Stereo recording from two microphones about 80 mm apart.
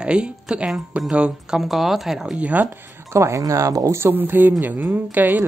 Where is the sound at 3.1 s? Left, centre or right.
Right.